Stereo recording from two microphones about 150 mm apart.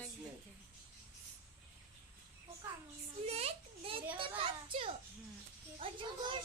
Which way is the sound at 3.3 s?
45° right (ahead or behind).